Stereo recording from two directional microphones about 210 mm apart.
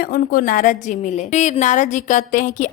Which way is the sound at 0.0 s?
45° left (ahead or behind).